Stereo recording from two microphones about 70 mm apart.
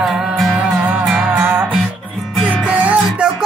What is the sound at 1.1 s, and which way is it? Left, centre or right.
Music, right.